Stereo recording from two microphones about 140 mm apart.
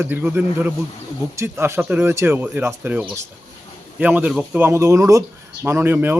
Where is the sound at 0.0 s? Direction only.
15° right (ahead or behind).